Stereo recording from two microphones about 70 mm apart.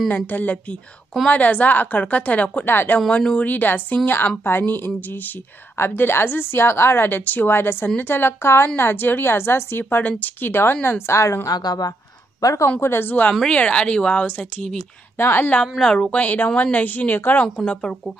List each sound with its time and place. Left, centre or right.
0.1 s a woman's voice: left
3.1 s a woman's voice: centre
10.5 s speech: left
11.4 s a woman's voice: left
12.4 s speech: left
12.8 s speech: left
13.3 s speech: centre
14.2 s a woman's voice: left
14.6 s speech: centre
15.1 s speech: left
15.6 s a woman's voice: centre; by 17.5 s left